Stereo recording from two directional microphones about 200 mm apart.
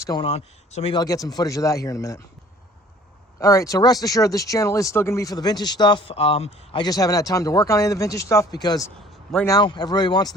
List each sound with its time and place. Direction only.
0.0 s speech: 20° left (ahead or behind)
0.9 s speech: 15° left (ahead or behind)
3.4 s speech: 15° left (ahead or behind)